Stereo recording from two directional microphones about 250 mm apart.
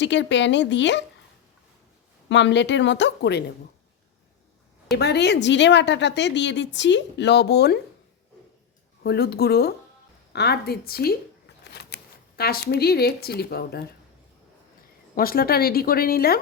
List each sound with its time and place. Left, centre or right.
0.0 s a woman's voice: left
2.3 s a woman's voice: left
4.9 s a woman's voice: left
9.0 s speech: left
10.3 s shuffling cards: left
12.4 s speech: left
15.1 s speech: left